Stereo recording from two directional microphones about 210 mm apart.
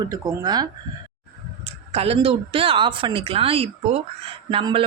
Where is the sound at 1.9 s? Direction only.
30° right (ahead or behind).